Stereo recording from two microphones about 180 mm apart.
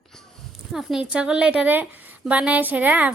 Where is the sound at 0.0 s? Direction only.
Centre (ahead or behind).